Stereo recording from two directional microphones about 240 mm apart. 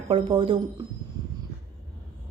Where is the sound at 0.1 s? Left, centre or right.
Right.